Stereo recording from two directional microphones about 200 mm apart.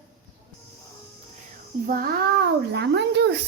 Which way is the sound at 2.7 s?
55° right (ahead or behind).